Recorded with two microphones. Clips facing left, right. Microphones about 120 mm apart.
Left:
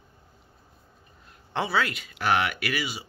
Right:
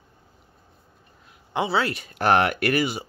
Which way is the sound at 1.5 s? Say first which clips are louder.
Right 3 dB; 25° right (ahead or behind).